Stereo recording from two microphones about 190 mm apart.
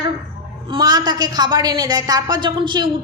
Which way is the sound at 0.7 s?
20° right (ahead or behind).